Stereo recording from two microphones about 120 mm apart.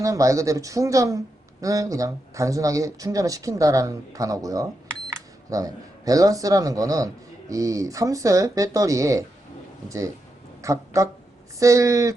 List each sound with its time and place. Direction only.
0.0 s speech: 25° right (ahead or behind)
10.6 s speech: 25° right (ahead or behind)